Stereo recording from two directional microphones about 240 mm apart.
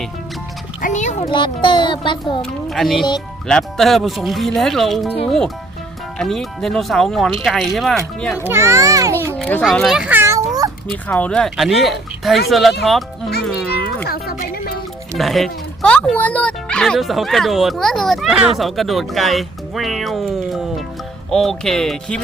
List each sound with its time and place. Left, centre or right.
0.8 s oink: left
1.2 s a child's voice: centre
2.4 s speech: centre
8.4 s a child's voice: centre
9.3 s children playing: centre
10.8 s speech: centre
14.0 s music: left
15.2 s speech: centre